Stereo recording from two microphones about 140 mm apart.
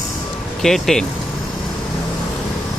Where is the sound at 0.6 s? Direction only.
Centre (ahead or behind).